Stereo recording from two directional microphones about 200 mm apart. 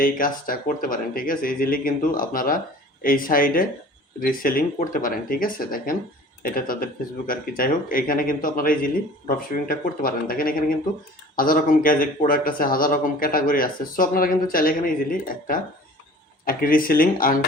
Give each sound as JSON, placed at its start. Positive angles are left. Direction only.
{"t": 0.0, "sound": "speech", "side_deg": 45}